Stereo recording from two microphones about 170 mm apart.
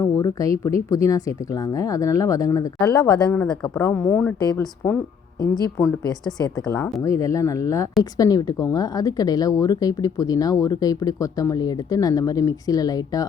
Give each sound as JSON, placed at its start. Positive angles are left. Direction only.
{"t": 0.0, "sound": "a woman's voice", "side_deg": 20}
{"t": 3.2, "sound": "speech", "side_deg": 5}
{"t": 4.4, "sound": "a woman's voice", "side_deg": 20}